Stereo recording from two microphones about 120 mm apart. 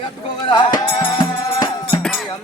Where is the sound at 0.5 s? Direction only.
40° left (ahead or behind).